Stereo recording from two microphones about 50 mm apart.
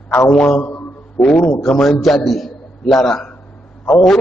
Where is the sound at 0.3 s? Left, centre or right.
Centre.